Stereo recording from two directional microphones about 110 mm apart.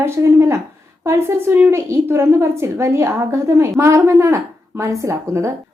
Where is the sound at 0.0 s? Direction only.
25° right (ahead or behind).